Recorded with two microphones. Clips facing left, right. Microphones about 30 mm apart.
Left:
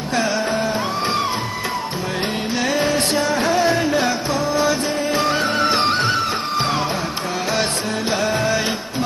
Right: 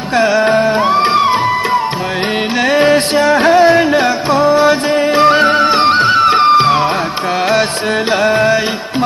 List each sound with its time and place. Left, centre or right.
0.4 s music: right
2.8 s music: right
5.7 s music: right
6.2 s music: right
8.2 s music: right